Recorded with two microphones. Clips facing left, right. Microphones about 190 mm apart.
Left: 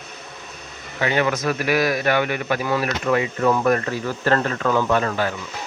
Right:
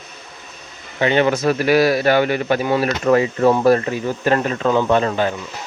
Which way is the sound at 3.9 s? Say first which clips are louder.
Right 3 dB; 15° right (ahead or behind).